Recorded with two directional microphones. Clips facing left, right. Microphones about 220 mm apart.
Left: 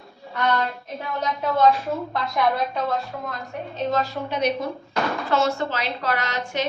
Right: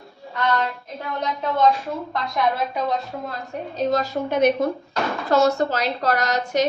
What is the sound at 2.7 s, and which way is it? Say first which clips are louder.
Speech: right 1 dB; 15° right (ahead or behind).